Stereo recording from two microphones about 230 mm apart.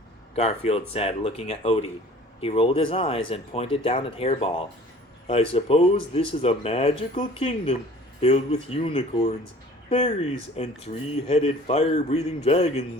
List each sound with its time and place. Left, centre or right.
0.3 s speech: left